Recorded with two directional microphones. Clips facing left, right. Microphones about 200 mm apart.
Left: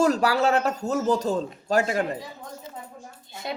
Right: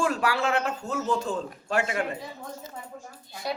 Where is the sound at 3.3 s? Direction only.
25° left (ahead or behind).